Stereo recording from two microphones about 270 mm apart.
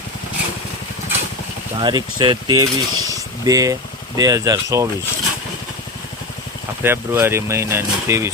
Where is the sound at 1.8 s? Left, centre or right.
Centre.